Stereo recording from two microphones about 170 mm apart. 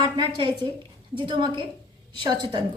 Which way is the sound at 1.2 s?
30° right (ahead or behind).